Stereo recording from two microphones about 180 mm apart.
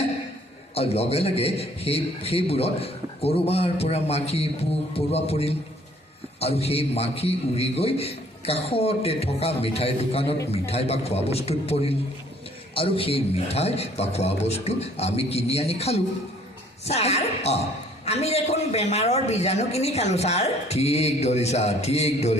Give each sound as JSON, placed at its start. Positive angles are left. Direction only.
{"t": 0.7, "sound": "a man's voice", "side_deg": 35}